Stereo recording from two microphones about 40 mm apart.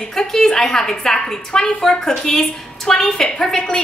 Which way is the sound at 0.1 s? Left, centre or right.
Centre.